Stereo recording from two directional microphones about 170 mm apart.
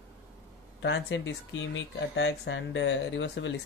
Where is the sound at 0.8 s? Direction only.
90° left.